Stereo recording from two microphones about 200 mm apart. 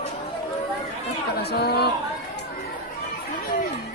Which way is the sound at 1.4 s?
55° left (ahead or behind).